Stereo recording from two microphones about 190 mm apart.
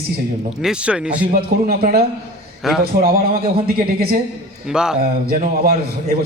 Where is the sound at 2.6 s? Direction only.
Centre (ahead or behind).